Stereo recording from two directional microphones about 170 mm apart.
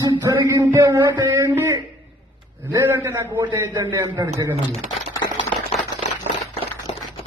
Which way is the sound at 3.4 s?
20° right (ahead or behind).